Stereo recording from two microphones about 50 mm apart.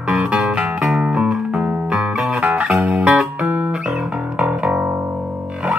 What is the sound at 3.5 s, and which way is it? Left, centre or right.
Music, right.